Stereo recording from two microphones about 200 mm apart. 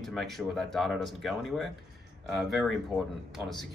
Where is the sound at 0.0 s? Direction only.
Centre (ahead or behind).